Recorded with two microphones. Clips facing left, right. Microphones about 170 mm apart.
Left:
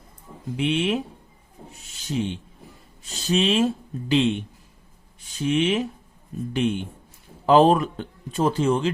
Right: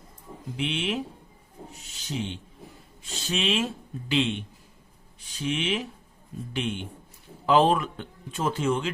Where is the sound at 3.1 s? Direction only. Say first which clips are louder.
Left 6 dB; 40° left (ahead or behind).